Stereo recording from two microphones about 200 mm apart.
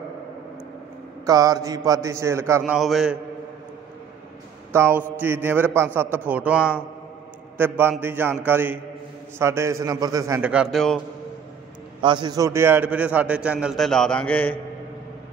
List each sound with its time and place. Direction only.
1.2 s a man's voice: 15° right (ahead or behind)
2.6 s a man's voice: centre (ahead or behind)
4.7 s a man's voice: 10° right (ahead or behind)
10.5 s a man's voice: centre (ahead or behind)
12.0 s a man's voice: 25° right (ahead or behind); by 14.6 s 5° left (ahead or behind)